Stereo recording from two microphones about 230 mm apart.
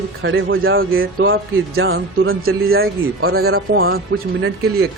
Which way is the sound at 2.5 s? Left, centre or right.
Right.